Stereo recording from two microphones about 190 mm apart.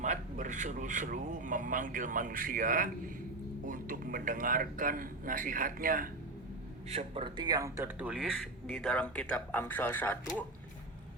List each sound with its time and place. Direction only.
0.0 s speech: 40° right (ahead or behind)
6.8 s speech: 30° right (ahead or behind); by 10.4 s 10° left (ahead or behind)